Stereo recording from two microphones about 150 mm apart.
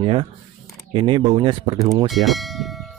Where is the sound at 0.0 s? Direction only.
35° right (ahead or behind).